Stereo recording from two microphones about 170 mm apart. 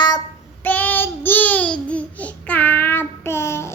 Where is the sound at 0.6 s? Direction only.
10° left (ahead or behind).